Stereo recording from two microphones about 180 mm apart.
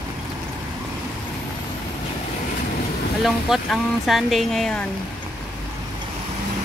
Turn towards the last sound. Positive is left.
turn(degrees=5)  # may be behind; listen again after turning